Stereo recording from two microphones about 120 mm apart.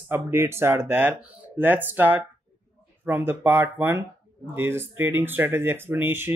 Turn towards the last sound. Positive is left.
turn(degrees=-15)  # may be behind; listen again after turning